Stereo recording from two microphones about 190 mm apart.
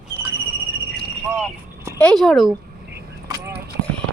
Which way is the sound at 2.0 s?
5° left (ahead or behind).